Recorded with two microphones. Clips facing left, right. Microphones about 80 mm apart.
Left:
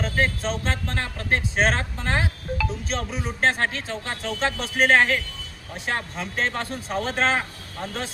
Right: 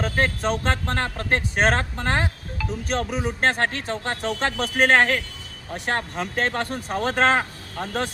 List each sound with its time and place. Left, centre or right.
0.0 s speech: right